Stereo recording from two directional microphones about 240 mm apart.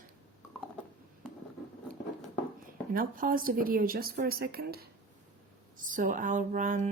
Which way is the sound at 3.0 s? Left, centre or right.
Right.